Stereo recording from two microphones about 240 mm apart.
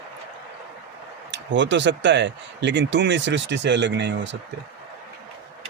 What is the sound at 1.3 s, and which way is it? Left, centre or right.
Speech, right.